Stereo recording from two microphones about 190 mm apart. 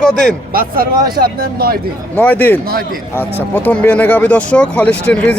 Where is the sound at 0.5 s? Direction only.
50° right (ahead or behind).